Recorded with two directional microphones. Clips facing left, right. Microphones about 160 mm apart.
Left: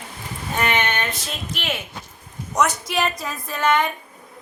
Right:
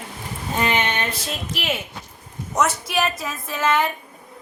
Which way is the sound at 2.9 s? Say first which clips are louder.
Right 1 dB; centre (ahead or behind).